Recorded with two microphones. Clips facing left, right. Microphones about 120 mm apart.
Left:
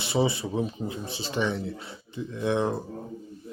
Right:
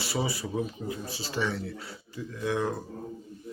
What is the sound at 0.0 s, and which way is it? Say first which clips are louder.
Speech: left 5 dB; 25° left (ahead or behind).